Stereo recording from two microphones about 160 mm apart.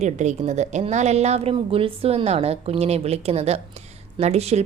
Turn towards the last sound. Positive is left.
turn(degrees=-40)  # may be behind; listen again after turning